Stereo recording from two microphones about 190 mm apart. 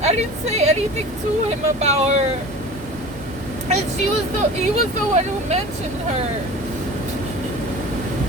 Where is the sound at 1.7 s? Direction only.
35° right (ahead or behind).